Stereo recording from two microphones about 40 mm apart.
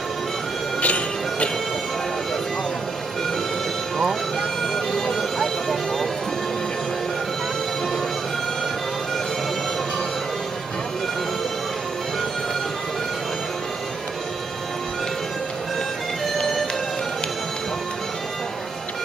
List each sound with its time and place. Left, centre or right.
0.7 s music: left
4.0 s music: centre